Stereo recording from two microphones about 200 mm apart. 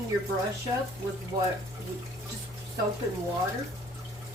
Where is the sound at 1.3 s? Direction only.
20° right (ahead or behind).